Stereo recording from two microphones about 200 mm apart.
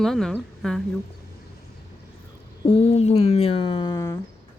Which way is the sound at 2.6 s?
30° left (ahead or behind).